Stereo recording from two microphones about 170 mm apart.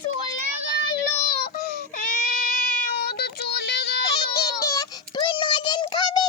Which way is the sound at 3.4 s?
80° left.